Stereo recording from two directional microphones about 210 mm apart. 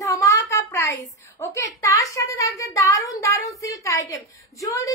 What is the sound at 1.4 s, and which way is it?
A child's voice, 15° left (ahead or behind).